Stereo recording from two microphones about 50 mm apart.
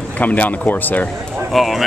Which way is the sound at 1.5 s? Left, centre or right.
Centre.